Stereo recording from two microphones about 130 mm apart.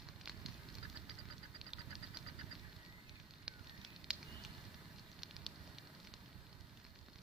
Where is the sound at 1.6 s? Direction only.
5° right (ahead or behind).